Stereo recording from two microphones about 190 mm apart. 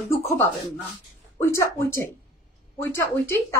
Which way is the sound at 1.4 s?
15° left (ahead or behind).